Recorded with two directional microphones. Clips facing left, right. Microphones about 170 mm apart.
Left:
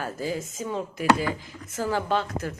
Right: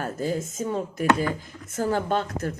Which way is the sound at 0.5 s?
45° right (ahead or behind).